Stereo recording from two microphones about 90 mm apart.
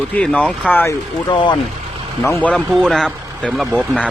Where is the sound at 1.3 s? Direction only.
60° left (ahead or behind).